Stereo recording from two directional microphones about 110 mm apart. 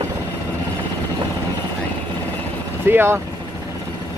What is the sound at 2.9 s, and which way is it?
Speech, 20° right (ahead or behind).